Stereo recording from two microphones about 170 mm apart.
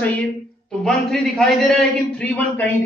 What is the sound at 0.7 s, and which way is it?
A man's voice, 5° left (ahead or behind).